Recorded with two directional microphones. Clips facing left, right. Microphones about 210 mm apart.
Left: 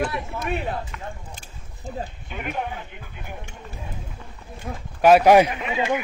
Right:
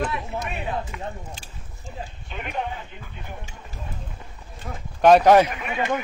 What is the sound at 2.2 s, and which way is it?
Speech, 5° left (ahead or behind).